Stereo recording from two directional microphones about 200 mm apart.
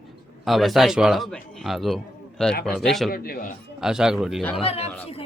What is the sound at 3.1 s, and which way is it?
Speech, 50° left (ahead or behind).